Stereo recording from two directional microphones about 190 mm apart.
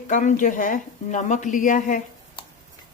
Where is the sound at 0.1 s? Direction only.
40° left (ahead or behind).